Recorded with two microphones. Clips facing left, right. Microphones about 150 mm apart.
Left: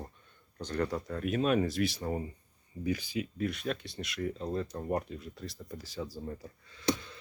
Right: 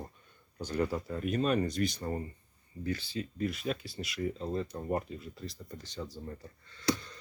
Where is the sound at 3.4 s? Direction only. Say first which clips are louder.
Right 2 dB; centre (ahead or behind).